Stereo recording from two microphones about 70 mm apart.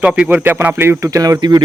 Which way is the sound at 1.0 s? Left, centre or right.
Right.